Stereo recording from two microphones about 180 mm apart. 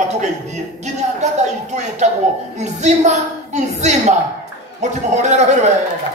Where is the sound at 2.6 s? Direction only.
40° right (ahead or behind).